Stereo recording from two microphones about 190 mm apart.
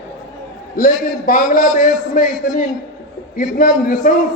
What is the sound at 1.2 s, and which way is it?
A man's voice, 45° left (ahead or behind).